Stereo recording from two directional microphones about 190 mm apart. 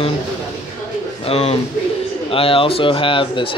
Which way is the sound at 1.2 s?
30° left (ahead or behind).